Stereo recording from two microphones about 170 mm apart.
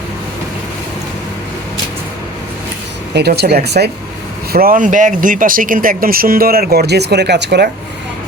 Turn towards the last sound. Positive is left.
turn(degrees=-80)